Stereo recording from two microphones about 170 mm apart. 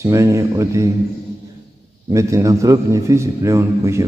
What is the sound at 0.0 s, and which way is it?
Speech, 15° right (ahead or behind).